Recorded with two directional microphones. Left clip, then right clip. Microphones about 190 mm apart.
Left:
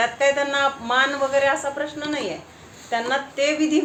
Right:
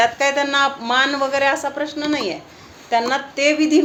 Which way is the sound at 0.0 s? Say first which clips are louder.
Right 3 dB; 35° right (ahead or behind).